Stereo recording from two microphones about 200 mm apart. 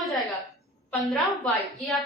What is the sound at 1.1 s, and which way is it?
Speech, centre (ahead or behind).